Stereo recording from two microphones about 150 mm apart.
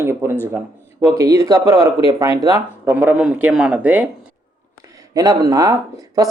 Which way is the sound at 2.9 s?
10° right (ahead or behind).